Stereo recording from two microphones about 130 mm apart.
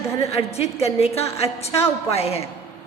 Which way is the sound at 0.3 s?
55° left (ahead or behind).